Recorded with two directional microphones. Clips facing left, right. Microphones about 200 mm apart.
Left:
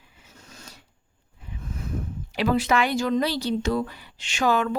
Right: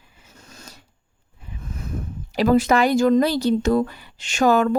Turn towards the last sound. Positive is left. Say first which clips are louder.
# right 6 dB
turn(degrees=-45)  # may be behind; listen again after turning